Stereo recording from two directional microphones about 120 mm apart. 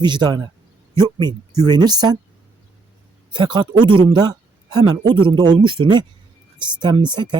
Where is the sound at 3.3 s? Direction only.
40° right (ahead or behind).